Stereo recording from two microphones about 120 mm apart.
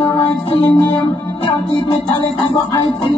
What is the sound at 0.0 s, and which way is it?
Music, 45° left (ahead or behind).